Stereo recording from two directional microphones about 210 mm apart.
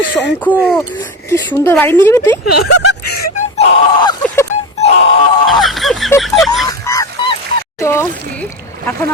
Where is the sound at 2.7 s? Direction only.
90° left.